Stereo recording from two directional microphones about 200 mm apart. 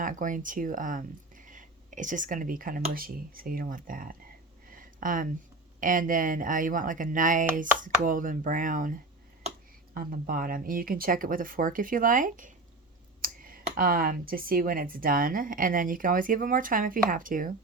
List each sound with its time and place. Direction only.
0.0 s speech: 40° right (ahead or behind)
4.7 s a sound: 45° right (ahead or behind)
5.8 s speech: 40° right (ahead or behind)